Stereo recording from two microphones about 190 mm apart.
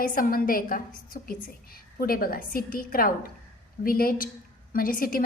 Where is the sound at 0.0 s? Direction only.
45° left (ahead or behind).